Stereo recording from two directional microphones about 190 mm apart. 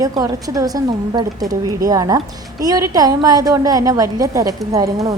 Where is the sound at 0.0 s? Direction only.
20° right (ahead or behind).